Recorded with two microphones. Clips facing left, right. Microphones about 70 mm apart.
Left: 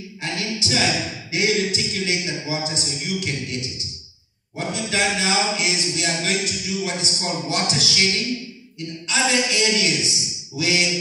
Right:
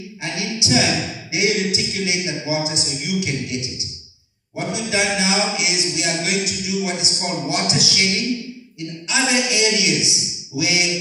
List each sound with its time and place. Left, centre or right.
0.2 s a sound: centre
1.3 s a man's voice: centre
4.6 s a man's voice: centre